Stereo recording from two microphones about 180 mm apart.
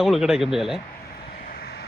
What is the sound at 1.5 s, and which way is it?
Vehicle, 55° left (ahead or behind).